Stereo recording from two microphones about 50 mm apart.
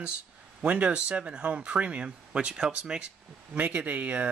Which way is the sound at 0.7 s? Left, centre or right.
Right.